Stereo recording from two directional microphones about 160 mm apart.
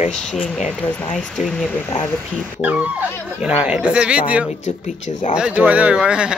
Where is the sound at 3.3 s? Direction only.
10° right (ahead or behind).